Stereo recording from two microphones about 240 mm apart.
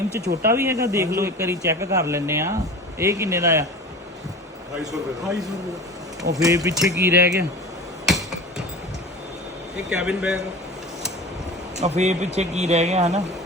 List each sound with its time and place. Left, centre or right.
0.4 s a man's voice: centre
6.3 s a man's voice: centre
8.0 s hammer: centre
9.9 s speech: centre
11.8 s speech: right